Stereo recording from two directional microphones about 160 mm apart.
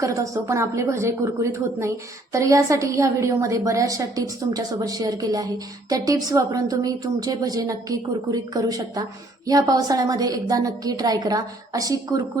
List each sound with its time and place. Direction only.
0.0 s a woman's voice: 20° right (ahead or behind)